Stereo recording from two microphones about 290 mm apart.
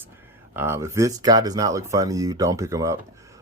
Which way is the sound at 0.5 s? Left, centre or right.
Centre.